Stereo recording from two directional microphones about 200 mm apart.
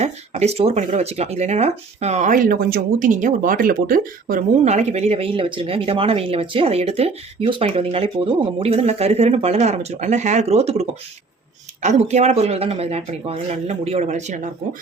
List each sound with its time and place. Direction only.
0.0 s speech: 30° right (ahead or behind)